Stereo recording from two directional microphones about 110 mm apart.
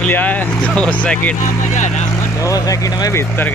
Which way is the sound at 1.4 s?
90° left.